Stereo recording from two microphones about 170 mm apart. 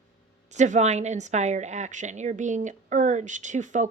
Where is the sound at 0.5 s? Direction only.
45° right (ahead or behind).